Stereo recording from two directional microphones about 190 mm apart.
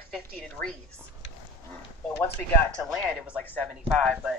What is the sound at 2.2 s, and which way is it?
Speech, 5° left (ahead or behind).